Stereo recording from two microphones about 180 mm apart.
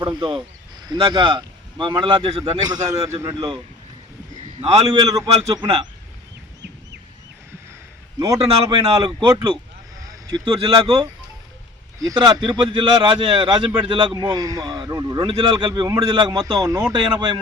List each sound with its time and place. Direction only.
0.0 s a man's voice: 25° right (ahead or behind)
2.4 s a man's voice: 15° right (ahead or behind)
4.6 s speech: 20° right (ahead or behind)
8.6 s speech: 25° right (ahead or behind)
16.5 s speech: 15° right (ahead or behind)